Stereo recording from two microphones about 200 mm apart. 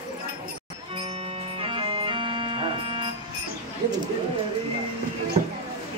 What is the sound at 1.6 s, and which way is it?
Music, 25° right (ahead or behind).